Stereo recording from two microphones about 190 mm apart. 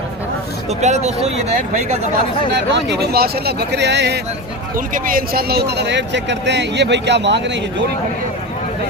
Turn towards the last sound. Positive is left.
turn(degrees=-65)  # may be behind; listen again after turning